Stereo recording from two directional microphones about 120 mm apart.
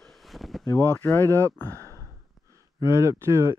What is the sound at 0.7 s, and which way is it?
Speech, 20° left (ahead or behind).